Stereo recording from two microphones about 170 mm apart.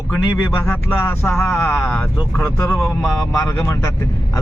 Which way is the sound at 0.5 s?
15° left (ahead or behind).